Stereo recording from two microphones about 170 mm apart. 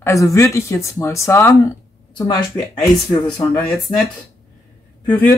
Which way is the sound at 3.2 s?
30° left (ahead or behind).